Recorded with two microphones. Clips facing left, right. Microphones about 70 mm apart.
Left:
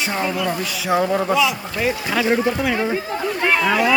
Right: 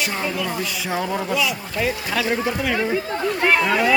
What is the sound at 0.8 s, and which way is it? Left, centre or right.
Speech, centre.